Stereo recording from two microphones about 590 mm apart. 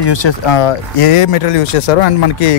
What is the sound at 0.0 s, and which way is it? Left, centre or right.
Speech, left.